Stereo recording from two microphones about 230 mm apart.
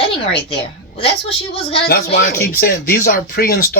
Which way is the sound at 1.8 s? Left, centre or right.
Left.